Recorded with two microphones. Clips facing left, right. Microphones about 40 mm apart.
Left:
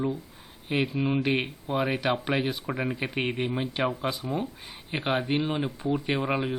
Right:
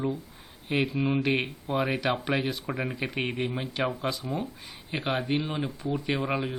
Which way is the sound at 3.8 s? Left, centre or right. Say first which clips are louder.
Left 1 dB; centre.